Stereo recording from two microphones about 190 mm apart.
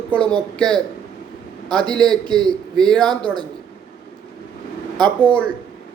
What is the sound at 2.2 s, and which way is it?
Speech, 20° right (ahead or behind).